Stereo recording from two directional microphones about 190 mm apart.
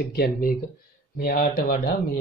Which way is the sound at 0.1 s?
50° left (ahead or behind).